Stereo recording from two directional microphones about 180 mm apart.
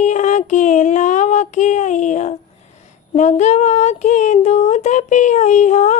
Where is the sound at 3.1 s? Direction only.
40° left (ahead or behind).